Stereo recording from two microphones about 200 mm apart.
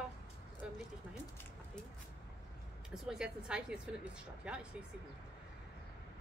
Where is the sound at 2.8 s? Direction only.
5° right (ahead or behind).